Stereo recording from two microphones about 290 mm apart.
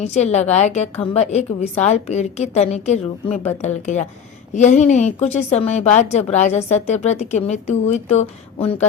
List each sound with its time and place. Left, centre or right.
0.0 s a woman's voice: left